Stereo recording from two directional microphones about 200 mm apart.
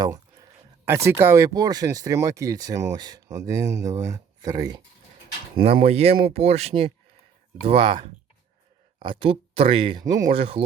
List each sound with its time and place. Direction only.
0.0 s a sound: 15° right (ahead or behind)
0.9 s speech: 15° right (ahead or behind)
5.5 s speech: 30° right (ahead or behind)